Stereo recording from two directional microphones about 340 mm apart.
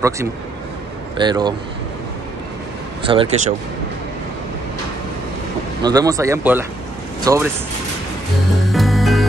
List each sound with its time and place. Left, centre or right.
1.1 s speech: centre
3.0 s speech: centre
5.8 s speech: centre
8.7 s music: centre